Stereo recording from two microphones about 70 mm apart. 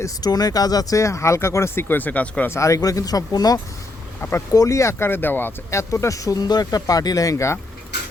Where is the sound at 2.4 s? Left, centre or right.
Left.